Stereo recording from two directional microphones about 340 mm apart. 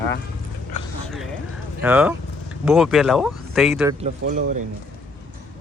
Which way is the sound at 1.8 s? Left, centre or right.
Centre.